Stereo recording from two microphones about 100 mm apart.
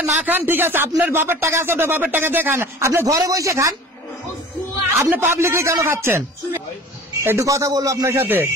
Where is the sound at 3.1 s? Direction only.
35° right (ahead or behind).